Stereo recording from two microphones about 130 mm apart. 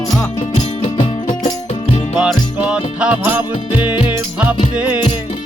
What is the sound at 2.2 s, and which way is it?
Music, 10° right (ahead or behind).